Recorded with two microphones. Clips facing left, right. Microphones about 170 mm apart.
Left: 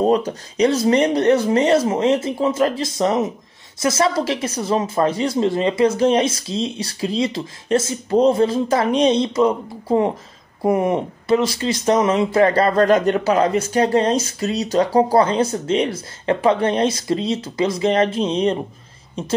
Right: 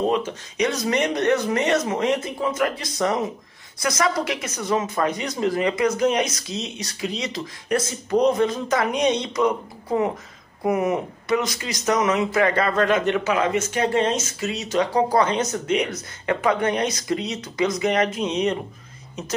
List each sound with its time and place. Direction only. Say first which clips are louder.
0.0 s speech: left 5 dB; 35° left (ahead or behind)